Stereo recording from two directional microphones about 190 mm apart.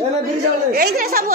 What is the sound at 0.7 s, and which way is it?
Speech, 55° right (ahead or behind).